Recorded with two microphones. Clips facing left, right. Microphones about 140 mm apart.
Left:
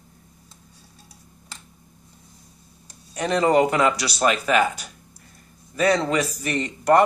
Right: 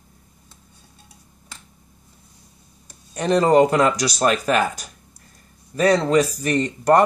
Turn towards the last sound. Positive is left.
turn(degrees=-40)  # may be behind; listen again after turning